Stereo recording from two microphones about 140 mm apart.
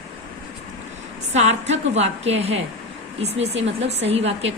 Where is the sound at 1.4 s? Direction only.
55° right (ahead or behind).